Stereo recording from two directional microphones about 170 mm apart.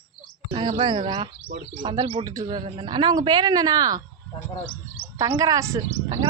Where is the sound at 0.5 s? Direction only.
30° right (ahead or behind).